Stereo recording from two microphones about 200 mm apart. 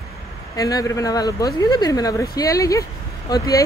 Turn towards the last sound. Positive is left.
turn(degrees=15)  # may be behind; listen again after turning